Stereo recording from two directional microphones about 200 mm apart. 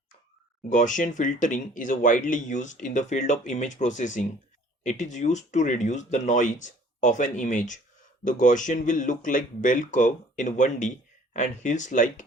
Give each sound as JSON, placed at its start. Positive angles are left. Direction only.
{"t": 0.7, "sound": "speech", "side_deg": 40}